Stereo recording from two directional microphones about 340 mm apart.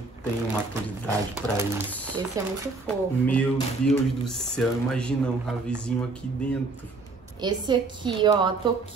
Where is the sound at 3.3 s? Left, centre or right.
Centre.